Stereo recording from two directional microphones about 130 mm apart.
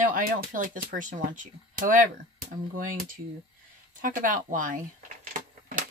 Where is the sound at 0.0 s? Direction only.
90° right.